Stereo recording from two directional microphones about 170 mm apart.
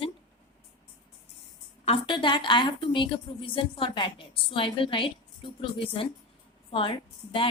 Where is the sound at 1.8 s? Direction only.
35° left (ahead or behind).